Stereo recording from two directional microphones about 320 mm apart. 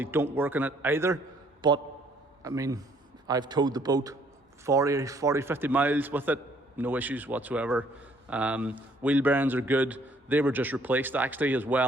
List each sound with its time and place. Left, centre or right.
0.0 s a man's voice: centre